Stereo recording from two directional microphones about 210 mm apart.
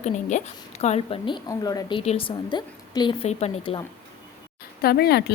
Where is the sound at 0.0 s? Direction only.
35° left (ahead or behind).